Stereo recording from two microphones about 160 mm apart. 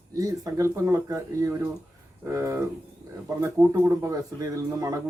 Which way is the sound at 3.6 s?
15° right (ahead or behind).